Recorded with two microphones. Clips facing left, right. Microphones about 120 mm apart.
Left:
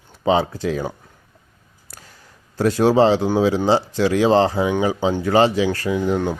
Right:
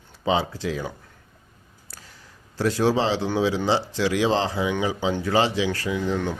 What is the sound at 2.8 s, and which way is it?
Speech, 50° left (ahead or behind).